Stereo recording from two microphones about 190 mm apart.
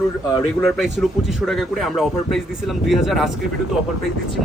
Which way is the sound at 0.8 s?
Centre (ahead or behind).